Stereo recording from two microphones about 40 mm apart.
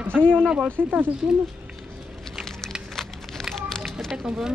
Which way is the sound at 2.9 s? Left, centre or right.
Centre.